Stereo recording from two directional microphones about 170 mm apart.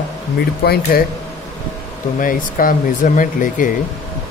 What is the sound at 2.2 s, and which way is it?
Speech, 55° left (ahead or behind).